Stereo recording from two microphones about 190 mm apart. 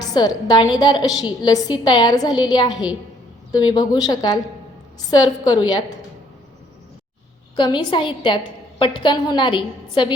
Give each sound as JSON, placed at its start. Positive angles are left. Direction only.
{"t": 0.0, "sound": "a woman's voice", "side_deg": 20}
{"t": 7.5, "sound": "a woman's voice", "side_deg": 25}